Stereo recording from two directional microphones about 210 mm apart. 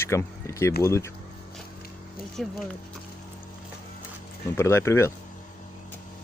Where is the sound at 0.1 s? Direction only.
15° left (ahead or behind).